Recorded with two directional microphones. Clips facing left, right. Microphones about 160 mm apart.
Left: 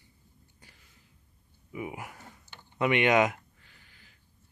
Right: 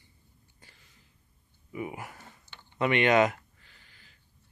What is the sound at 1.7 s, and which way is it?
Speech, 10° left (ahead or behind).